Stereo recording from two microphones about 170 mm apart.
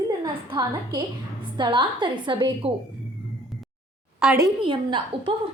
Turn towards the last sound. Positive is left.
turn(degrees=-30)  # may be behind; listen again after turning